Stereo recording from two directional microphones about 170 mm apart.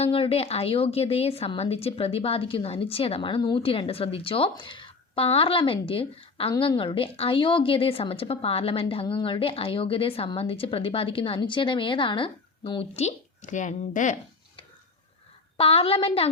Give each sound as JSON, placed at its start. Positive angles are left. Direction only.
{"t": 0.0, "sound": "a woman's voice", "side_deg": 35}
{"t": 15.5, "sound": "a woman's voice", "side_deg": 35}